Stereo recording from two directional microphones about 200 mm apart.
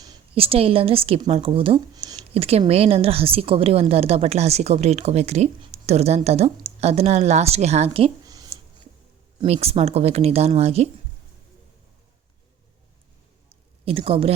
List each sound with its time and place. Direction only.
0.0 s speech: 25° right (ahead or behind)
9.4 s speech: 30° right (ahead or behind)
13.5 s a sound: 30° right (ahead or behind)